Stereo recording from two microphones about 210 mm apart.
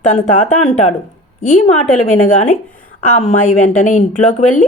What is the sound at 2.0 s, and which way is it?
Speech, 30° left (ahead or behind).